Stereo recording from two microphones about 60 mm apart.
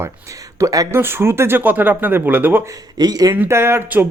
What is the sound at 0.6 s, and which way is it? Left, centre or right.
Speech, right.